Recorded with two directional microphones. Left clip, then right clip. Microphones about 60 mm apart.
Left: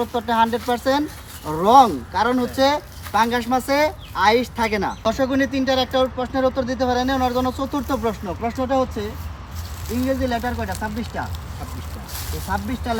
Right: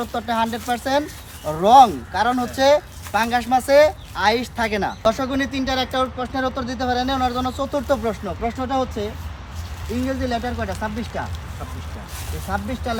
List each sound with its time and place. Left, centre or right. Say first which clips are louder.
0.0 s speech: left 2 dB; right
0.3 s speech: left 4 dB; right
8.4 s speech: left 2 dB; right
10.1 s speech: left 2 dB; right
12.5 s speech: even; right